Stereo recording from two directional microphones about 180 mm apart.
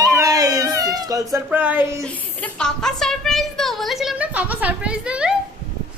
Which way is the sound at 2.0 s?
5° left (ahead or behind).